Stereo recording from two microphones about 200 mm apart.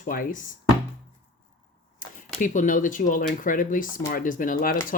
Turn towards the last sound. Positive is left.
turn(degrees=45)  # may be behind; listen again after turning